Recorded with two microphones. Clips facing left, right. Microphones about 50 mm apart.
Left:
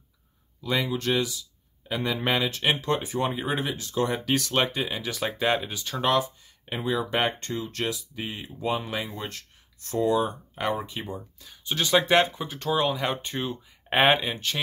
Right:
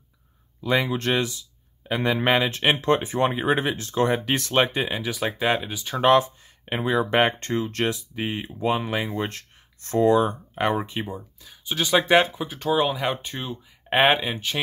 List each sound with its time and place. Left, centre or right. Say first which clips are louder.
0.7 s speech: right 3 dB; right
5.0 s speech: even; centre
5.9 s speech: right 6 dB; right
10.5 s speech: right 4 dB; right
11.1 s speech: right 2 dB; centre